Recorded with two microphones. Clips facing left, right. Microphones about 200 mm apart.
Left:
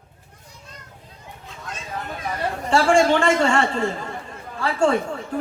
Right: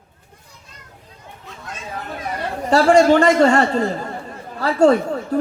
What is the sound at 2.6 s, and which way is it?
A man's voice, 40° right (ahead or behind).